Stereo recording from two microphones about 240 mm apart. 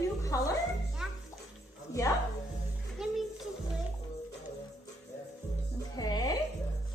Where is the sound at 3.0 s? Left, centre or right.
Centre.